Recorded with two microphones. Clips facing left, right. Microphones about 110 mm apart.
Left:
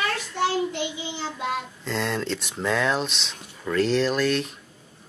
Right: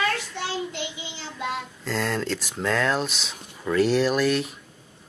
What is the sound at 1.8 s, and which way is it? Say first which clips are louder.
Speech: right 1 dB; centre (ahead or behind).